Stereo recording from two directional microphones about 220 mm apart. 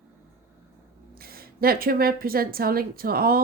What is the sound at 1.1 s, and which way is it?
A woman's voice, 40° right (ahead or behind).